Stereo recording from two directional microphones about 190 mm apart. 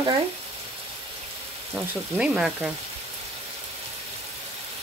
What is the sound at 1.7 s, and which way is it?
Speech, 5° right (ahead or behind).